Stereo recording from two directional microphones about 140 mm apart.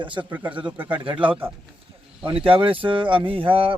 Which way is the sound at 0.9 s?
35° right (ahead or behind).